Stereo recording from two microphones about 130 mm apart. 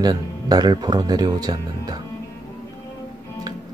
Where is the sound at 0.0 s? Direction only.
30° right (ahead or behind).